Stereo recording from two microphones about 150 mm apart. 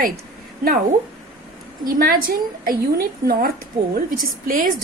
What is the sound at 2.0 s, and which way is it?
A woman's voice, 70° right (ahead or behind).